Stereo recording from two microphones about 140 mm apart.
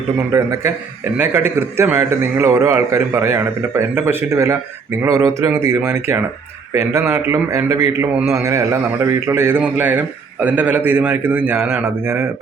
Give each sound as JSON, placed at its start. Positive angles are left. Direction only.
{"t": 0.3, "sound": "a man's voice", "side_deg": -20}